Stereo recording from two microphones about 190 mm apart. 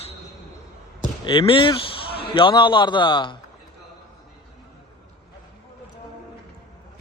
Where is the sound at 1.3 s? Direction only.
25° left (ahead or behind).